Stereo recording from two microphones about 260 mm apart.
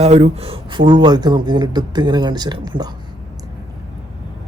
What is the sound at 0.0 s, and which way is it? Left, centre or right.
Speech, right.